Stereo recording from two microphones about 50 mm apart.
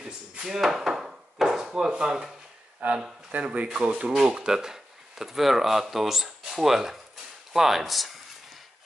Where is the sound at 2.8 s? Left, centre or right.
Right; by 7.0 s centre.